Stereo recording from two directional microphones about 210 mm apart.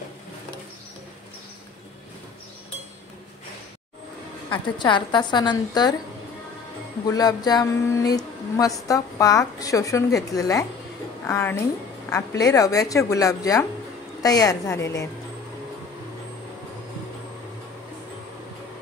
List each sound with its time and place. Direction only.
4.5 s a woman's voice: 20° left (ahead or behind)
7.1 s a woman's voice: 20° left (ahead or behind)